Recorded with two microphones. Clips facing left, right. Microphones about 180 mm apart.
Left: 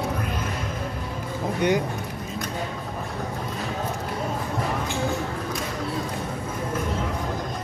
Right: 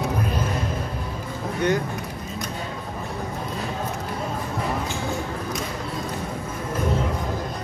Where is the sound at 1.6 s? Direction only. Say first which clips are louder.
Even; 15° left (ahead or behind).